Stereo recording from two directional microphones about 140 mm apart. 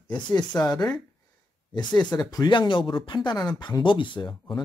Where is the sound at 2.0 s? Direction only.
30° left (ahead or behind).